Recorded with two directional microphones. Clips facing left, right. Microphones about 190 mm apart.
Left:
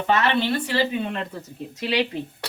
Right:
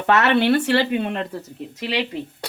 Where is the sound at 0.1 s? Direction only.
70° right (ahead or behind).